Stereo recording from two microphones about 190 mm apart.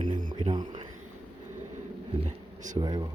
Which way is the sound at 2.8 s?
20° right (ahead or behind).